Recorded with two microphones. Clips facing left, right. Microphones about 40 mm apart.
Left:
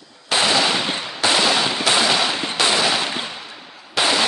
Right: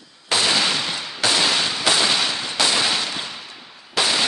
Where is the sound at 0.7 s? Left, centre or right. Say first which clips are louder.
Left 2 dB; left.